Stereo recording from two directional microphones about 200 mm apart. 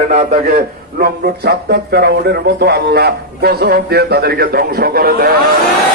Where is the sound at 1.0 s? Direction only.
55° right (ahead or behind).